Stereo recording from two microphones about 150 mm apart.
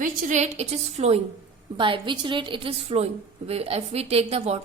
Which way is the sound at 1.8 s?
35° right (ahead or behind).